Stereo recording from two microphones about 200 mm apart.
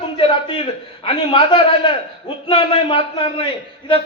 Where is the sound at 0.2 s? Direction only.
25° left (ahead or behind).